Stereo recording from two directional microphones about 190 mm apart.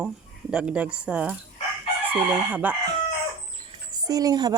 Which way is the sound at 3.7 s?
20° right (ahead or behind).